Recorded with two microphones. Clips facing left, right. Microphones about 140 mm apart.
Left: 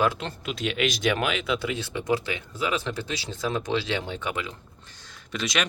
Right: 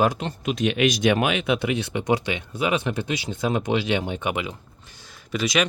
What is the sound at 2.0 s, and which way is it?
Speech, 75° right (ahead or behind).